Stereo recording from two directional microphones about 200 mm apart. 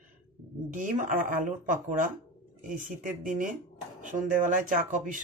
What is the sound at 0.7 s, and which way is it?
Speech, 40° right (ahead or behind).